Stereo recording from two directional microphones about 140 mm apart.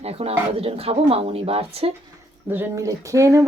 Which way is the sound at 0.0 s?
45° right (ahead or behind).